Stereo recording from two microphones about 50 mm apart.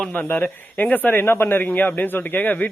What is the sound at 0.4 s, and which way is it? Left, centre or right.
Speech, left.